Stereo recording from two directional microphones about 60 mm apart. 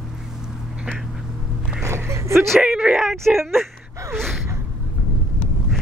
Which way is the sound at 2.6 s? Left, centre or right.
Centre.